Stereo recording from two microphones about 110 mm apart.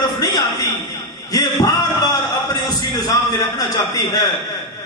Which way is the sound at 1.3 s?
35° left (ahead or behind).